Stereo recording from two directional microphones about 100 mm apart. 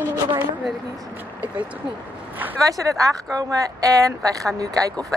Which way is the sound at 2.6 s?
35° right (ahead or behind).